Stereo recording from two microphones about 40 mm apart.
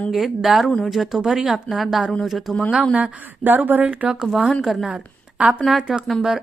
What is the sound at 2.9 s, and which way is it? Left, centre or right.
Speech, right.